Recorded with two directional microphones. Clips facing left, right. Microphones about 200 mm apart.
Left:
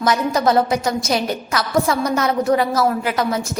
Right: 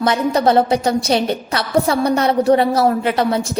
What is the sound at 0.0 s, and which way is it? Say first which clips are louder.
A woman's voice: right 2 dB; 30° right (ahead or behind).